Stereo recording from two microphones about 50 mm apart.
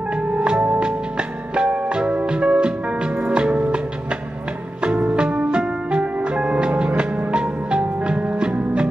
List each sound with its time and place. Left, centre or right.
0.4 s music: right
4.8 s music: right